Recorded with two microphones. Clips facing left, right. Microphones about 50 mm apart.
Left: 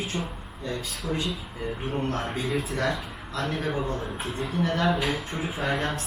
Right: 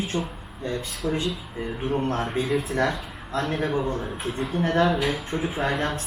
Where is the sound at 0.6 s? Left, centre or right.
Right.